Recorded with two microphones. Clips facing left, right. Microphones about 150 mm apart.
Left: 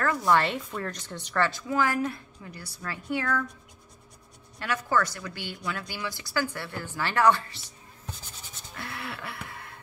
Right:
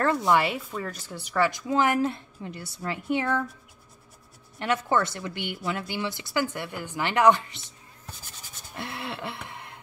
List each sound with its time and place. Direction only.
0.0 s a woman's voice: 20° right (ahead or behind)
0.4 s speech: 5° right (ahead or behind)
1.7 s a woman's voice: 20° right (ahead or behind)
4.6 s a woman's voice: 25° right (ahead or behind)
8.7 s a sound: 25° right (ahead or behind)